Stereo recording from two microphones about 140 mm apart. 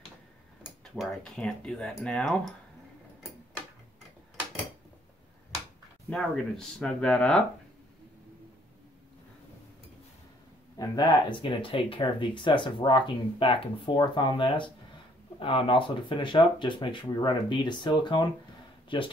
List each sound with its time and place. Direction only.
0.7 s speech: centre (ahead or behind)
6.0 s speech: 5° left (ahead or behind)
10.8 s speech: 30° left (ahead or behind)